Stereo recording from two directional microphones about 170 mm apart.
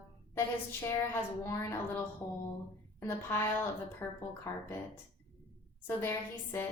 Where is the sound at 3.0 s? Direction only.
10° left (ahead or behind).